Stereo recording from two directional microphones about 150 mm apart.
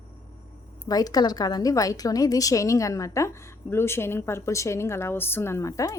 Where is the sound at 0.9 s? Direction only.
25° left (ahead or behind).